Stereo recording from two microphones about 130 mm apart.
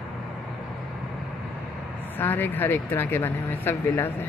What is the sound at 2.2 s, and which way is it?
Speech, 15° left (ahead or behind).